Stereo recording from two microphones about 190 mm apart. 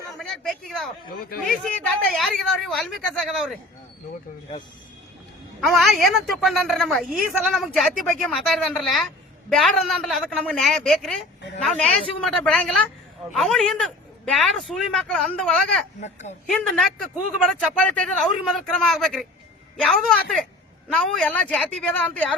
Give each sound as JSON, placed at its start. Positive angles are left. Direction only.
{"t": 0.1, "sound": "a sound", "side_deg": 0}
{"t": 1.5, "sound": "a woman's voice", "side_deg": 0}
{"t": 5.5, "sound": "a woman's voice", "side_deg": 0}
{"t": 16.0, "sound": "speech", "side_deg": 35}
{"t": 16.5, "sound": "a woman's voice", "side_deg": 0}